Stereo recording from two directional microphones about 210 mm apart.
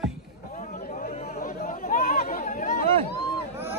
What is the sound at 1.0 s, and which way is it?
Chatter, 35° left (ahead or behind).